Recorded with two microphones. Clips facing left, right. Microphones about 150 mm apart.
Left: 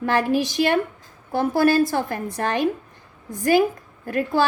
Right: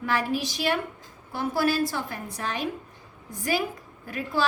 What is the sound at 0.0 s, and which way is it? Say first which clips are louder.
A woman's voice: left 6 dB; 55° left (ahead or behind).